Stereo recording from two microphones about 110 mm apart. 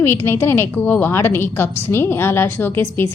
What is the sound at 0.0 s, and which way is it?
A woman's voice, 20° left (ahead or behind).